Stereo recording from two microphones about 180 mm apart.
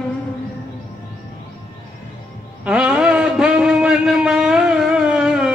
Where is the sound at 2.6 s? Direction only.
5° right (ahead or behind).